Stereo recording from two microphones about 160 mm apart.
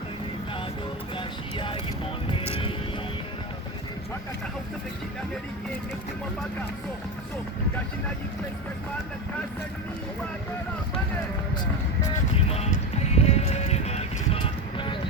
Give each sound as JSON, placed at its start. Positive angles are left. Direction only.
{"t": 1.1, "sound": "music", "side_deg": 30}
{"t": 12.5, "sound": "music", "side_deg": 40}